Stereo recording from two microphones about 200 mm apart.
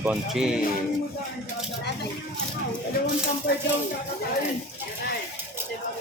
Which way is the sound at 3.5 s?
55° left (ahead or behind).